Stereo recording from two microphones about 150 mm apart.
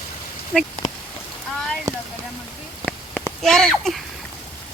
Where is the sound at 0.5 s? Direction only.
10° left (ahead or behind).